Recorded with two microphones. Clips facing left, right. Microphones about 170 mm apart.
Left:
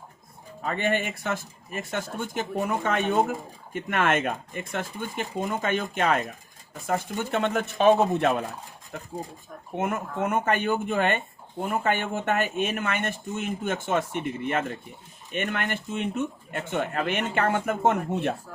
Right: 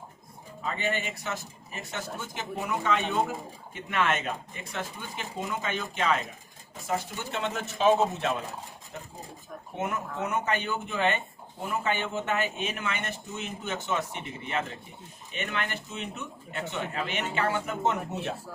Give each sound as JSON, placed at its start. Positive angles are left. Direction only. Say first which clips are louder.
{"t": 0.6, "sound": "speech", "louder": "left 5 dB", "side_deg": 55}
{"t": 9.7, "sound": "speech", "louder": "left 4 dB", "side_deg": 50}